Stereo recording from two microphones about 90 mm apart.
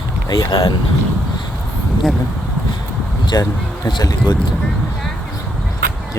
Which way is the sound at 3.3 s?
50° left (ahead or behind).